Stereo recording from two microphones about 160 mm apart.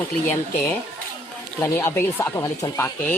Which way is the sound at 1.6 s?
15° left (ahead or behind).